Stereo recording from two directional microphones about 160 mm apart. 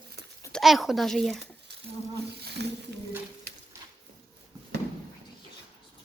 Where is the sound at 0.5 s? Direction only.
Centre (ahead or behind).